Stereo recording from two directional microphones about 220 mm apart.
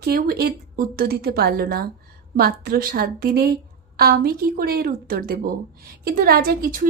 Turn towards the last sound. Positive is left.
turn(degrees=-40)  # may be behind; listen again after turning